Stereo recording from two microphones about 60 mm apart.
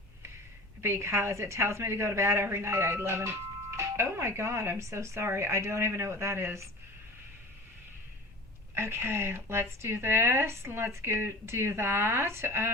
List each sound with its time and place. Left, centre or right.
0.8 s a woman's voice: right
8.7 s a woman's voice: right